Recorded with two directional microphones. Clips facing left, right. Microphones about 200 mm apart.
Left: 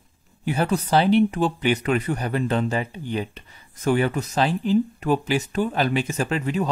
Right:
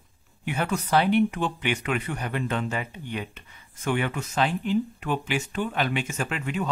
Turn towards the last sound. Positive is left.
turn(degrees=35)  # may be behind; listen again after turning